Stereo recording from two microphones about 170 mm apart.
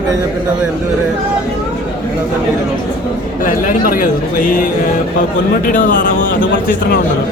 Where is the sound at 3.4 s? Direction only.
50° left (ahead or behind).